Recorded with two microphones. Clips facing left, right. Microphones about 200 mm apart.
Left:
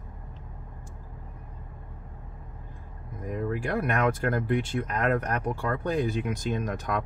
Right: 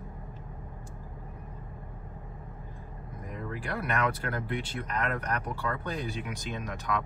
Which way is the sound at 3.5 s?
45° left (ahead or behind).